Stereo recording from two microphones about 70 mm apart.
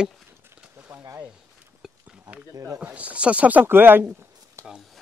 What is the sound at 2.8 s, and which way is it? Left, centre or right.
Speech, right.